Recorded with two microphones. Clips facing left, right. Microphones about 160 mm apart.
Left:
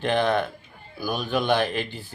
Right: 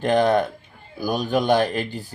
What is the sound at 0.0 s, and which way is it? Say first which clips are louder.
Speech: right 4 dB; 40° right (ahead or behind).